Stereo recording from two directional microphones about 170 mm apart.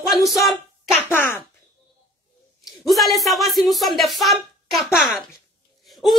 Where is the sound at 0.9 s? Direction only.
15° left (ahead or behind).